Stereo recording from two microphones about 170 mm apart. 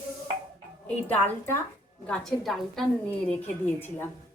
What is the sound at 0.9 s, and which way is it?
A woman's voice, 10° left (ahead or behind).